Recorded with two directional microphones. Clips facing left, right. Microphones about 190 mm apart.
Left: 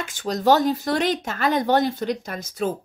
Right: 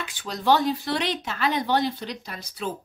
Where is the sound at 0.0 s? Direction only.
45° left (ahead or behind).